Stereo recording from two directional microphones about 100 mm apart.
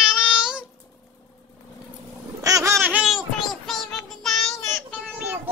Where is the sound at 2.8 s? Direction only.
15° right (ahead or behind).